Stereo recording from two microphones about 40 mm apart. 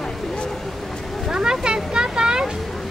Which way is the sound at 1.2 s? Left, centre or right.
Centre.